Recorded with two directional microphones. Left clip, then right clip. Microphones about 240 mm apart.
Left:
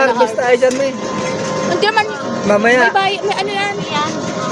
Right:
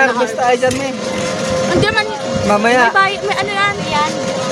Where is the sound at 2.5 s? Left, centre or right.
Centre.